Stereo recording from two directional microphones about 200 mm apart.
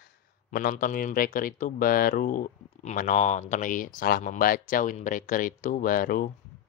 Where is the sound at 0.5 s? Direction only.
45° left (ahead or behind).